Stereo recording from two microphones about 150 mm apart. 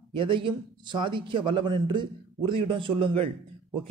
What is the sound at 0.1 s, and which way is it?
A man's voice, 35° right (ahead or behind).